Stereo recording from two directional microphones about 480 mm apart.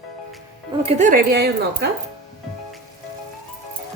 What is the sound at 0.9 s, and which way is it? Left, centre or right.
Speech, centre.